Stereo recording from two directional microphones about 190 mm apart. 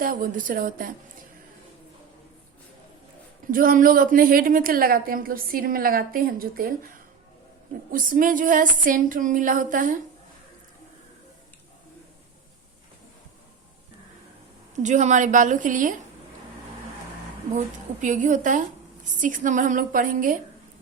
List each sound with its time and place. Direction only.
0.0 s a woman's voice: 50° right (ahead or behind)
3.4 s a woman's voice: 45° right (ahead or behind)
7.9 s a woman's voice: 45° right (ahead or behind)
14.8 s a woman's voice: 40° right (ahead or behind)
18.0 s a woman's voice: 40° right (ahead or behind)